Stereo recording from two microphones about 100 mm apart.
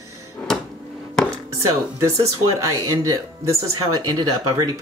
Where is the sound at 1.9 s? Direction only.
30° right (ahead or behind).